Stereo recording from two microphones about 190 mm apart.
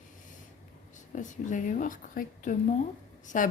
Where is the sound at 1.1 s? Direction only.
40° left (ahead or behind).